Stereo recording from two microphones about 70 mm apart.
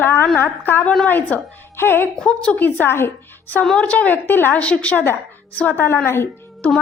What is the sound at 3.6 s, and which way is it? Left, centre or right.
A woman's voice, centre.